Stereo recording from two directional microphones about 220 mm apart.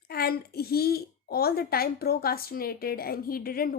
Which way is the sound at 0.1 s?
45° left (ahead or behind).